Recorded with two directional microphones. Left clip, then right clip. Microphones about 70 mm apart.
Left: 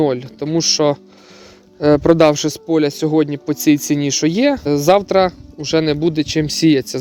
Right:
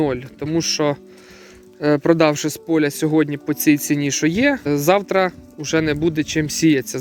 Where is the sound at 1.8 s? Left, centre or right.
Left.